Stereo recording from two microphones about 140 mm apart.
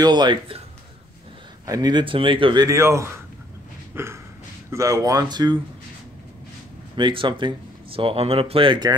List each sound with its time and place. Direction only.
0.0 s speech: 30° right (ahead or behind)
1.7 s speech: 30° right (ahead or behind)
2.7 s speech: 20° right (ahead or behind)
3.9 s a sound: 20° right (ahead or behind)
4.6 s speech: 25° right (ahead or behind)
7.0 s speech: 35° right (ahead or behind)